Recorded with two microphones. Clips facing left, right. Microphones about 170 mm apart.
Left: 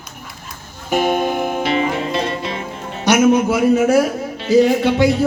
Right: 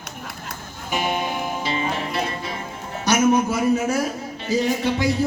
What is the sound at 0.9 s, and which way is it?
Music, 50° left (ahead or behind).